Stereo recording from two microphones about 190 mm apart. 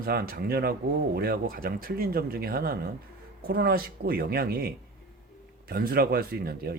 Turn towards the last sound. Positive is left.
turn(degrees=-55)  # may be behind; listen again after turning